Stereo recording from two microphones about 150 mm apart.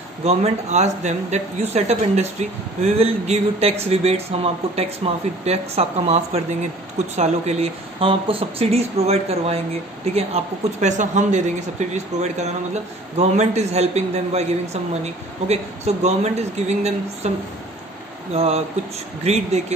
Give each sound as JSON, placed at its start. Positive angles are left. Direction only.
{"t": 0.2, "sound": "speech", "side_deg": -45}
{"t": 18.3, "sound": "speech", "side_deg": -40}